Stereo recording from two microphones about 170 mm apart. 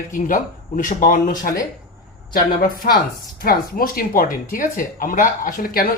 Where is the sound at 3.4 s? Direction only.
60° left (ahead or behind).